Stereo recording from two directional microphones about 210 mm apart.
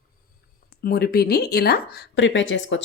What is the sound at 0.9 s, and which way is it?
A woman's voice, 50° left (ahead or behind).